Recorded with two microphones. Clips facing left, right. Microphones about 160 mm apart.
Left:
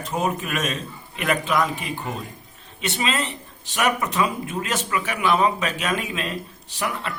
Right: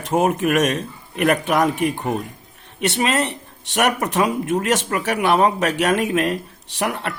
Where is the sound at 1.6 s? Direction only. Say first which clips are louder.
Right 7 dB; 75° right (ahead or behind).